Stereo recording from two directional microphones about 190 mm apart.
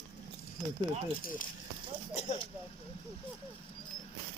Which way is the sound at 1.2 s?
45° left (ahead or behind).